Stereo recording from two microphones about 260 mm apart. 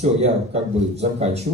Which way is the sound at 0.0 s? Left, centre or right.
Right.